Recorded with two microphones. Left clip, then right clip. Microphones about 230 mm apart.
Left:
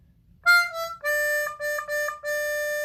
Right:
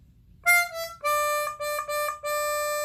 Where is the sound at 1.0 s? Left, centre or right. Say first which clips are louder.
Even; centre.